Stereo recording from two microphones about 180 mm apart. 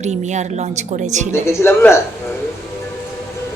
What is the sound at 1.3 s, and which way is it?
A man's voice, 15° left (ahead or behind).